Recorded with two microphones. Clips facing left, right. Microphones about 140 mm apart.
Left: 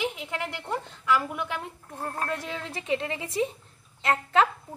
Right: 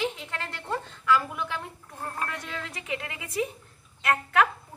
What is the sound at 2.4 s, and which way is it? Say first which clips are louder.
A woman's voice: left 5 dB; 30° left (ahead or behind).